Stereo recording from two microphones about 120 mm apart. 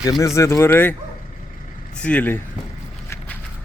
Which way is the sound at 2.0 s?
10° left (ahead or behind).